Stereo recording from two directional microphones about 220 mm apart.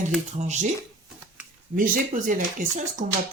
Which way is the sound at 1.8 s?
40° right (ahead or behind).